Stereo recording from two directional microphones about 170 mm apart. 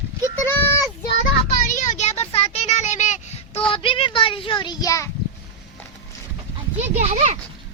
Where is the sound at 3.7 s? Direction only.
30° left (ahead or behind).